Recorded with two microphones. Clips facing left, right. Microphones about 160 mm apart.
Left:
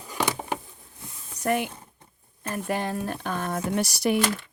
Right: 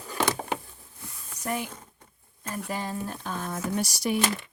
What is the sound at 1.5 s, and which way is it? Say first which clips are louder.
Speech: left 6 dB; 65° left (ahead or behind).